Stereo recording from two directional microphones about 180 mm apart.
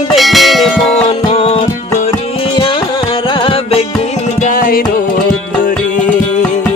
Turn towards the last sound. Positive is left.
turn(degrees=50)  # may be behind; listen again after turning